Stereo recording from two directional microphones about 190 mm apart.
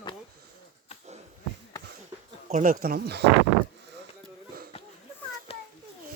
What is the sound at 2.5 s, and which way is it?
Speech, 45° right (ahead or behind).